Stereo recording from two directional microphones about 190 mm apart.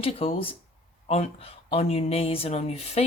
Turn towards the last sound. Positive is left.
turn(degrees=30)  # may be behind; listen again after turning